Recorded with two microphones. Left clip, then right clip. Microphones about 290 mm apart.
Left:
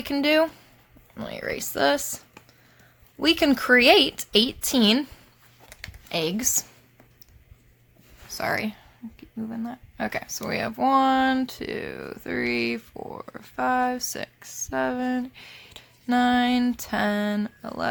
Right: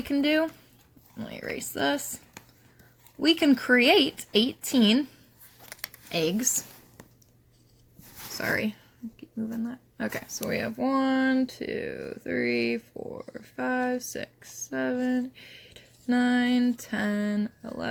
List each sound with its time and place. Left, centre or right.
0.0 s speech: left
3.2 s speech: centre
6.1 s speech: centre
8.4 s speech: centre